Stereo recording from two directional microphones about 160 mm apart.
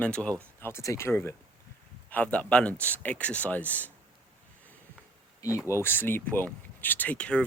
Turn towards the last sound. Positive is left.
turn(degrees=5)  # may be behind; listen again after turning